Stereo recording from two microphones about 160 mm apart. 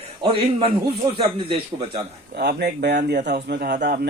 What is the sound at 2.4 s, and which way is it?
Speech, 85° right.